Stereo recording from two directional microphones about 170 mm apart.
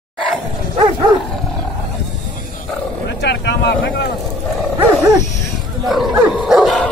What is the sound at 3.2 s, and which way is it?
Vehicle, 85° left.